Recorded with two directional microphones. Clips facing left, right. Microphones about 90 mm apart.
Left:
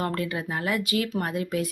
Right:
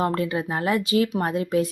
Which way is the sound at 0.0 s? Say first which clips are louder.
Right 5 dB; 25° right (ahead or behind).